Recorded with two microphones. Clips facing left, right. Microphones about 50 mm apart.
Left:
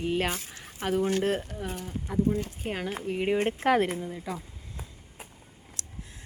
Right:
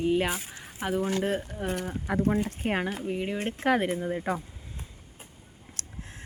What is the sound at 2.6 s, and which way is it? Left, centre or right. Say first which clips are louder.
Speech: right 6 dB; right.